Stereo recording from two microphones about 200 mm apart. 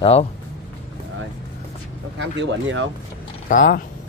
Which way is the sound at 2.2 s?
65° right (ahead or behind).